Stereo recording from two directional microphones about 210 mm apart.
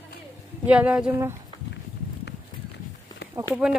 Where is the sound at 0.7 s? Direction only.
5° right (ahead or behind).